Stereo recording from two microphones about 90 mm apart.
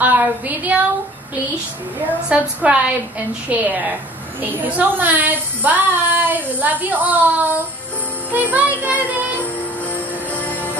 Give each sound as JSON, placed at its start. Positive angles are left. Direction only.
{"t": 0.0, "sound": "child singing", "side_deg": -20}
{"t": 2.2, "sound": "a woman's voice", "side_deg": -10}
{"t": 8.3, "sound": "music", "side_deg": -20}
{"t": 10.3, "sound": "music", "side_deg": 20}